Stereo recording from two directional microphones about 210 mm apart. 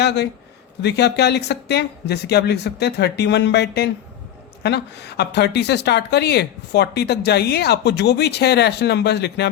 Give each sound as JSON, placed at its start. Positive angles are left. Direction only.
{"t": 0.0, "sound": "speech", "side_deg": 55}